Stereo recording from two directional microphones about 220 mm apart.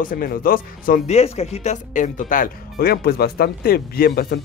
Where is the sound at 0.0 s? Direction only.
40° left (ahead or behind).